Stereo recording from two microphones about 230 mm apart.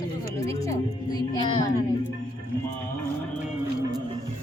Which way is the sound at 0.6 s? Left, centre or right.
Centre.